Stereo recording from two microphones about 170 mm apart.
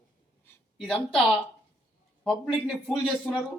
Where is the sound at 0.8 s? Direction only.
Centre (ahead or behind).